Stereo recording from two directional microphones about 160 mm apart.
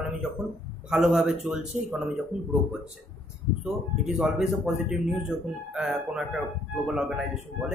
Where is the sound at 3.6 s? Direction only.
5° right (ahead or behind).